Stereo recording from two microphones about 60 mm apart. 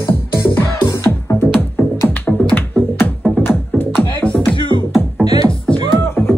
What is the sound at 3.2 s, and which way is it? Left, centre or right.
Music, left.